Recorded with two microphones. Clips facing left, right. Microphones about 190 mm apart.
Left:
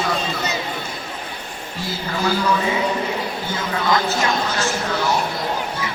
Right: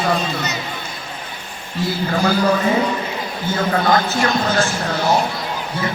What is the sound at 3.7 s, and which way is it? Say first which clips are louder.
Speech: right 2 dB; 50° right (ahead or behind).